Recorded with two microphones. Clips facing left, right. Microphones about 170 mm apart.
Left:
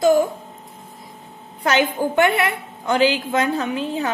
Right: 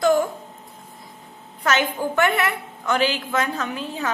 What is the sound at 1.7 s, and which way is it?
A woman's voice, 15° left (ahead or behind).